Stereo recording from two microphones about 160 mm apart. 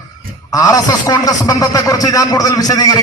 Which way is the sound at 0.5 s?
20° left (ahead or behind).